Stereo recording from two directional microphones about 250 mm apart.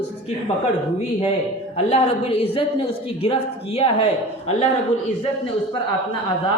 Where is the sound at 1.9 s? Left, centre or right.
Left.